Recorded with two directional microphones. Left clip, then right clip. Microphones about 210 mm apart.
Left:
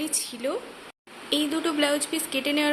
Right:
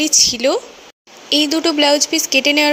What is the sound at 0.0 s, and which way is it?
Speech, 30° right (ahead or behind).